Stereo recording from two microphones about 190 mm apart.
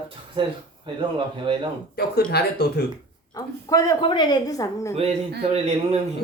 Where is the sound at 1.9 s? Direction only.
55° left (ahead or behind).